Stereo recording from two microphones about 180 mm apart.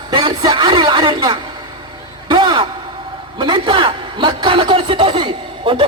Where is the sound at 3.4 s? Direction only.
25° right (ahead or behind).